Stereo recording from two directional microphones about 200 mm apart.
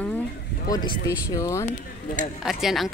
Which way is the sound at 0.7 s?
20° left (ahead or behind).